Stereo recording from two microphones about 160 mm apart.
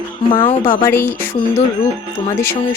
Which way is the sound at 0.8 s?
15° left (ahead or behind).